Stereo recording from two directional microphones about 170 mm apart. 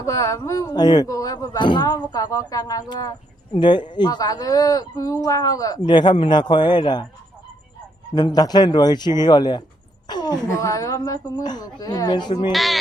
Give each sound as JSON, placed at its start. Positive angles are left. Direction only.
{"t": 0.0, "sound": "speech", "side_deg": 20}
{"t": 8.1, "sound": "speech", "side_deg": 25}
{"t": 12.5, "sound": "speech", "side_deg": 0}